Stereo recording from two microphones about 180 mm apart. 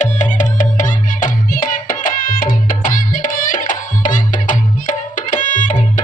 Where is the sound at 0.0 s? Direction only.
40° left (ahead or behind).